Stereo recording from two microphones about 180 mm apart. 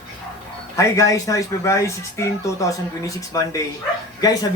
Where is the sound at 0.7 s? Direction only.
15° left (ahead or behind).